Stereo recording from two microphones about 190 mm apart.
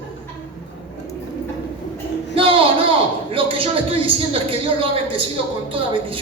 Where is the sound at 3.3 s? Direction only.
30° right (ahead or behind).